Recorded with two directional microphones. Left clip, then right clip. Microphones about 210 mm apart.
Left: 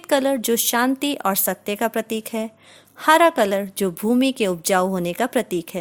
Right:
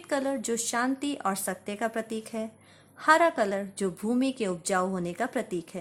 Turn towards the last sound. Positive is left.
turn(degrees=40)  # may be behind; listen again after turning